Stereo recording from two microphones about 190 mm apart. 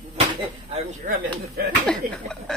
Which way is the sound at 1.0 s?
45° right (ahead or behind).